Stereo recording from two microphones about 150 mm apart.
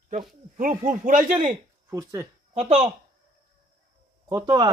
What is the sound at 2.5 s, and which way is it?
Speech, 45° right (ahead or behind).